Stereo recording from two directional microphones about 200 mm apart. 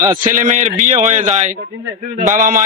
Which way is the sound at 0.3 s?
40° right (ahead or behind).